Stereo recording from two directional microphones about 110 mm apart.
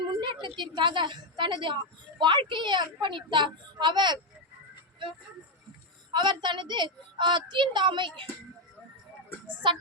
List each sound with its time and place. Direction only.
0.2 s a woman's voice: 45° right (ahead or behind)
6.1 s a woman's voice: 45° right (ahead or behind)
9.5 s a woman's voice: 45° right (ahead or behind)